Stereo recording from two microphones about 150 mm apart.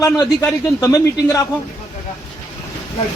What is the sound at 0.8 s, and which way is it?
Speech, 20° left (ahead or behind).